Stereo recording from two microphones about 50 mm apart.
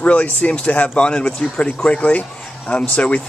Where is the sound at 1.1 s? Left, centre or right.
Centre.